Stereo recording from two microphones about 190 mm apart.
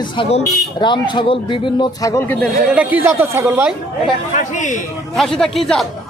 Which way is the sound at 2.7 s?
10° right (ahead or behind).